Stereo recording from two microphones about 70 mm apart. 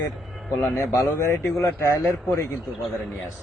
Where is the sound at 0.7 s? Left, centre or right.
Left.